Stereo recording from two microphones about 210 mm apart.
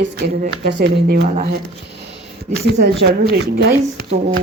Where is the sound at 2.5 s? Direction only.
50° right (ahead or behind).